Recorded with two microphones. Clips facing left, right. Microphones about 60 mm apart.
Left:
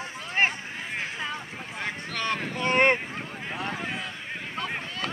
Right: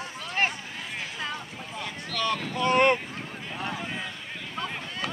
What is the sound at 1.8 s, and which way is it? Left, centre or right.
Boat, left.